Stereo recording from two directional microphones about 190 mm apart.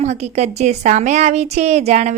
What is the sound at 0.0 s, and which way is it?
A woman's voice, 35° right (ahead or behind).